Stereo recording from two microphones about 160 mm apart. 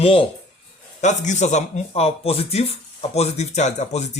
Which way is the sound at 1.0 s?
50° left (ahead or behind).